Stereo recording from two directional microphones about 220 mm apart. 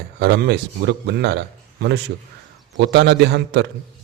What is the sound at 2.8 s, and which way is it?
Speech, 50° right (ahead or behind).